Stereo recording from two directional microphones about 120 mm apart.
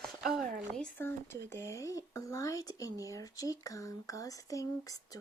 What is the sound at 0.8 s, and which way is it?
Speech, 20° left (ahead or behind).